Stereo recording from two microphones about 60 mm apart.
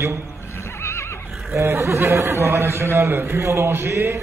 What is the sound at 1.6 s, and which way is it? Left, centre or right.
Speech, right.